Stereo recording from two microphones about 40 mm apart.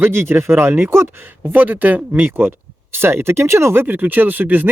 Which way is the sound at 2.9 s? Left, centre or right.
Right.